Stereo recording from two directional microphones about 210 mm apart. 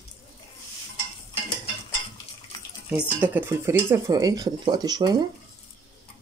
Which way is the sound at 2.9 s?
10° right (ahead or behind).